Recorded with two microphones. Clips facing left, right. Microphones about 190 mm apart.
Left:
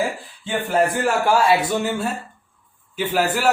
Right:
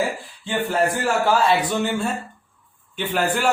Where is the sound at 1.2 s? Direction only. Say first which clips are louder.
Left 1 dB; 10° left (ahead or behind).